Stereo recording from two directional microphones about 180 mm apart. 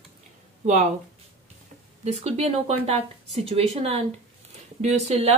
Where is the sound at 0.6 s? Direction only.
40° right (ahead or behind).